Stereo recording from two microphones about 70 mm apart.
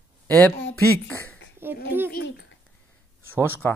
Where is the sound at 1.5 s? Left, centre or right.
Right.